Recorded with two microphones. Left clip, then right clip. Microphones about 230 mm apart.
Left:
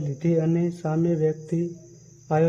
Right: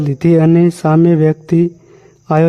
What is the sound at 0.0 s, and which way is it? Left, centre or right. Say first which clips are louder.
A man's voice: right 13 dB; right.